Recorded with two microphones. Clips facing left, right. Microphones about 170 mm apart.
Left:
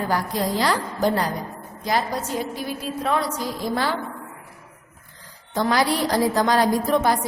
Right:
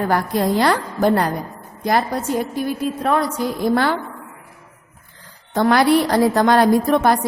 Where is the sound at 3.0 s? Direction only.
55° right (ahead or behind).